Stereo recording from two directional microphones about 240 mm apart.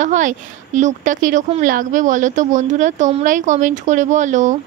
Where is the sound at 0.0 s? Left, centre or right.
Right.